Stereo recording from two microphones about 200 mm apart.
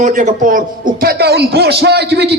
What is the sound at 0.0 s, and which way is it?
A man's voice, 40° right (ahead or behind).